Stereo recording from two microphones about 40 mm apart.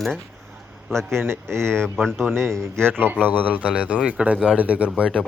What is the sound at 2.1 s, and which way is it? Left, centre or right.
Speech, right.